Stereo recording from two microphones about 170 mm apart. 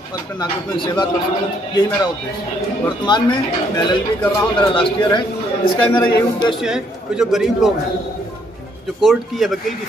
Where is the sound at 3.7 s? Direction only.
25° left (ahead or behind).